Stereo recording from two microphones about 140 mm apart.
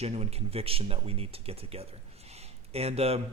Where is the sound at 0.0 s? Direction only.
50° right (ahead or behind).